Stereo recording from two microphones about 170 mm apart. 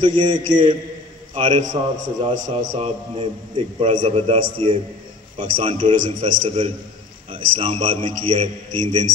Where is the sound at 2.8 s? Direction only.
35° right (ahead or behind).